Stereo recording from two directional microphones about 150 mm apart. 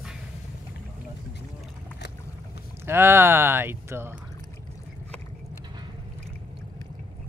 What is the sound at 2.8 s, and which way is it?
Speech, 15° right (ahead or behind).